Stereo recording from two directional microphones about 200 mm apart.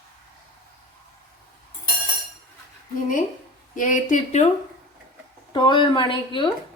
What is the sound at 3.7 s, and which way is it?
Speech, 40° left (ahead or behind).